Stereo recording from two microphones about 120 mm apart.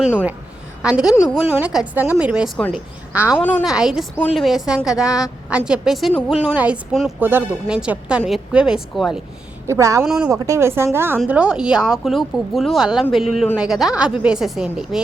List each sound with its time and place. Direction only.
0.0 s a woman's voice: 10° right (ahead or behind)
6.5 s speech: 15° right (ahead or behind)
9.6 s a woman's voice: 25° right (ahead or behind)
10.1 s speech: 5° right (ahead or behind)
10.3 s a woman's voice: 25° right (ahead or behind)
11.3 s speech: 10° right (ahead or behind)